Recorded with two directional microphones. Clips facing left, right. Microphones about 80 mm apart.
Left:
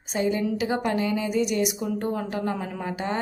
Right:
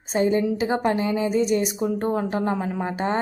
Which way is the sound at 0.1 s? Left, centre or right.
Right.